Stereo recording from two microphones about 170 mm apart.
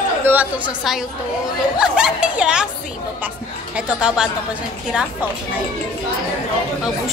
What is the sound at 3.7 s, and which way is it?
Speech, 5° right (ahead or behind).